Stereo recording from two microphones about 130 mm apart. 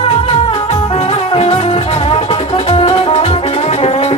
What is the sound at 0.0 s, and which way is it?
Music, 45° left (ahead or behind).